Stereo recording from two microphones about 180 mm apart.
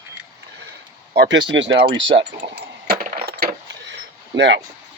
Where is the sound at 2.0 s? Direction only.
30° right (ahead or behind).